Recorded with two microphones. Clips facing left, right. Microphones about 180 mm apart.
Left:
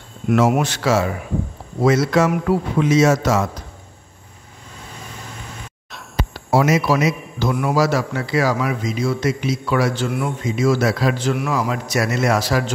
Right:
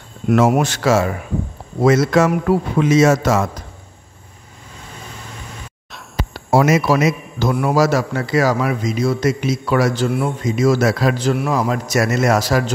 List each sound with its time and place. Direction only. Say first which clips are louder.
0.3 s a man's voice: right 2 dB; 45° right (ahead or behind)
6.5 s a man's voice: right 2 dB; 50° right (ahead or behind)